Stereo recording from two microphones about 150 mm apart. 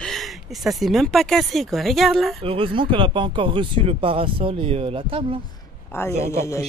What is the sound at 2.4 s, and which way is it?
Speech, 35° right (ahead or behind).